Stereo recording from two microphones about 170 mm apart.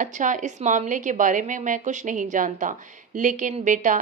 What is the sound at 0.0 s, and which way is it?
Speech, 50° right (ahead or behind).